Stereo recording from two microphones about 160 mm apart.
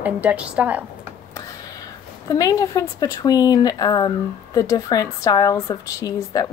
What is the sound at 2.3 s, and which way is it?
A woman's voice, 20° left (ahead or behind).